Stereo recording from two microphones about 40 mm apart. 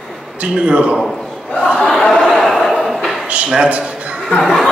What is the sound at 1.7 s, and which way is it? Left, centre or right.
Speech, centre.